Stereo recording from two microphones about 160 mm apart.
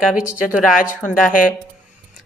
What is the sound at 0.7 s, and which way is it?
Speech, 55° left (ahead or behind).